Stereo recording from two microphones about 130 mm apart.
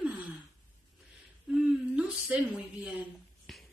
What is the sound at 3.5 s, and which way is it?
Finger snapping, centre (ahead or behind).